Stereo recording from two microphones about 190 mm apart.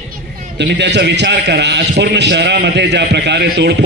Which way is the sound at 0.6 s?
65° right (ahead or behind).